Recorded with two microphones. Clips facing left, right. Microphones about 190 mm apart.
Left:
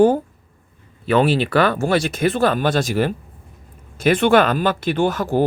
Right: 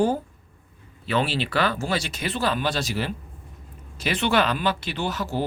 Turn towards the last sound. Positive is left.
turn(degrees=50)  # may be behind; listen again after turning